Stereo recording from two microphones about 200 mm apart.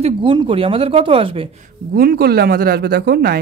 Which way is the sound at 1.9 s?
50° right (ahead or behind).